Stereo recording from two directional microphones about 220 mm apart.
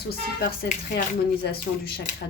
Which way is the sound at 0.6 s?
35° left (ahead or behind).